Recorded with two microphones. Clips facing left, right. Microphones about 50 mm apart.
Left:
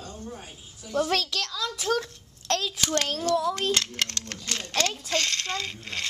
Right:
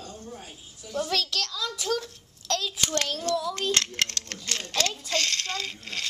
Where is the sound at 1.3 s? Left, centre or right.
Centre.